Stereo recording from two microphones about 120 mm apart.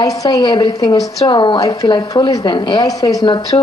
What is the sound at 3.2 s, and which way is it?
Speech, 45° left (ahead or behind).